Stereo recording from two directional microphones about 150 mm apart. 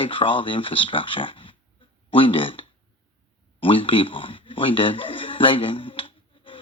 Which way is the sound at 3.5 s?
35° left (ahead or behind).